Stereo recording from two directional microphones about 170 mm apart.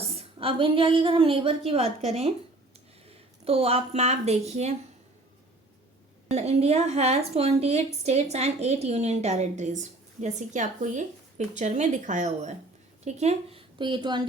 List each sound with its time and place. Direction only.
0.0 s a woman's voice: 35° right (ahead or behind)
6.3 s a woman's voice: 40° right (ahead or behind)
13.7 s speech: 30° right (ahead or behind)